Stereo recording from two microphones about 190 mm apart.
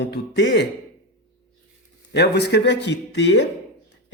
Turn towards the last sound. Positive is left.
turn(degrees=65)  # may be behind; listen again after turning